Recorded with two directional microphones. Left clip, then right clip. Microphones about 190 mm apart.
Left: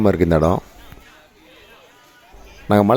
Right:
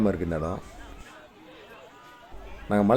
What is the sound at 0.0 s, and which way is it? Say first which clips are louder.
Speech: left 12 dB; 50° left (ahead or behind).